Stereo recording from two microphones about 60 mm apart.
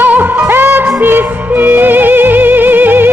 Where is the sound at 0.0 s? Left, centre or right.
Right.